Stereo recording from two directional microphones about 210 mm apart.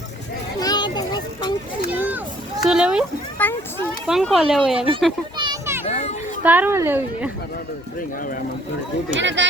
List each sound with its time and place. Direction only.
0.6 s children playing: 20° left (ahead or behind)
1.9 s a sound: 10° right (ahead or behind)
2.6 s speech: 5° right (ahead or behind)
3.4 s a sound: 10° left (ahead or behind)
4.0 s speech: centre (ahead or behind)
5.4 s children playing: 10° right (ahead or behind)
5.8 s children playing: 30° left (ahead or behind)
6.4 s speech: 10° right (ahead or behind)
9.1 s speech: 60° right (ahead or behind)